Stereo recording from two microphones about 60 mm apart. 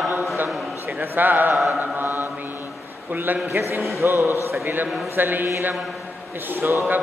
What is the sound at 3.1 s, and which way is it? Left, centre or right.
Speech, right.